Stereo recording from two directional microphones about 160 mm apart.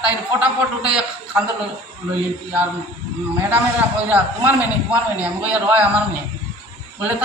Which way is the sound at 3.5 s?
10° right (ahead or behind).